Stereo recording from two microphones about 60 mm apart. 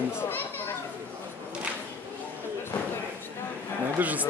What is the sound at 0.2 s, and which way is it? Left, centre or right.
Children playing, left.